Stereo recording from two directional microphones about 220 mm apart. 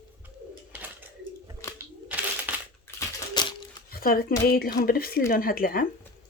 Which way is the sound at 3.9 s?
45° left (ahead or behind).